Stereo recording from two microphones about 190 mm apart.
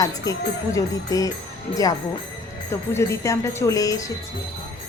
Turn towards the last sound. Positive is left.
turn(degrees=15)  # may be behind; listen again after turning